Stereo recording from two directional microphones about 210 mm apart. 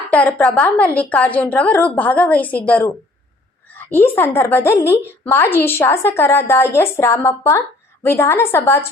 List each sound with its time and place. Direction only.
0.1 s a woman's voice: 5° left (ahead or behind)